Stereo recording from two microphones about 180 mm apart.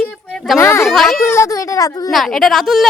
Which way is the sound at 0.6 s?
15° left (ahead or behind).